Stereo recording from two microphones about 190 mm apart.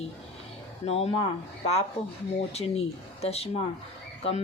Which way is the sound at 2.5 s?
35° left (ahead or behind).